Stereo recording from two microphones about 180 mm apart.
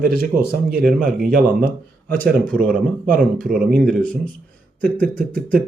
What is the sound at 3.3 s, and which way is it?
Speech, 5° left (ahead or behind).